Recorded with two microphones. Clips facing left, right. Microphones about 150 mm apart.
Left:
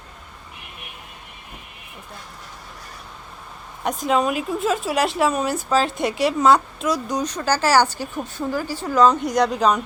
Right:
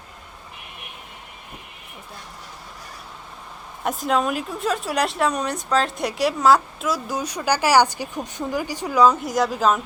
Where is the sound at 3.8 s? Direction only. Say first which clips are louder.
Left 1 dB; centre (ahead or behind).